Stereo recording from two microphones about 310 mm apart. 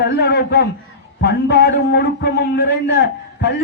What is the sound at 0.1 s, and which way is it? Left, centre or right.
A man's voice, left.